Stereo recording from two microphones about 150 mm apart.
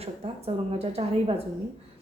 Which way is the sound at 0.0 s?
40° right (ahead or behind).